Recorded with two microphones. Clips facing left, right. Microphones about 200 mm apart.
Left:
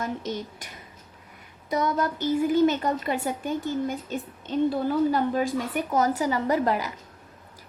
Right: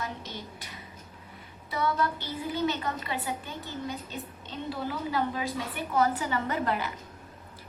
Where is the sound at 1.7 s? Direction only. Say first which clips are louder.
Left 4 dB; 40° left (ahead or behind).